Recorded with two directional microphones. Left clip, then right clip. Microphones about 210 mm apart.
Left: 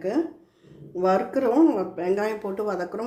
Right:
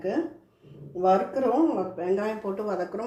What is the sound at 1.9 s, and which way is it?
Speech, 45° left (ahead or behind).